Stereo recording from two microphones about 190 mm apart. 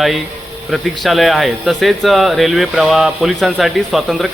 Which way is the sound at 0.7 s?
Centre (ahead or behind).